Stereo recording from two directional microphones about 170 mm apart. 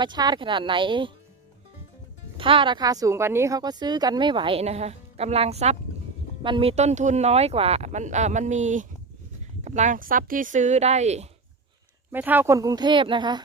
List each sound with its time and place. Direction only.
0.0 s speech: 25° right (ahead or behind)
2.4 s speech: 30° right (ahead or behind)
12.1 s speech: 10° right (ahead or behind); by 13.4 s 25° right (ahead or behind)